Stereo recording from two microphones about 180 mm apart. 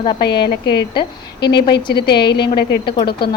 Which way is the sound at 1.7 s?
25° left (ahead or behind).